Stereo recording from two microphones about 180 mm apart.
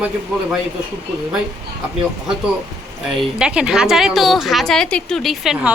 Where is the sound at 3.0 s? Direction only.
5° right (ahead or behind).